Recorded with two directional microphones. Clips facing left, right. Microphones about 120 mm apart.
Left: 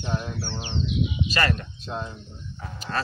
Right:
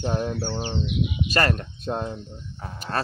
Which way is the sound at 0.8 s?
55° right (ahead or behind).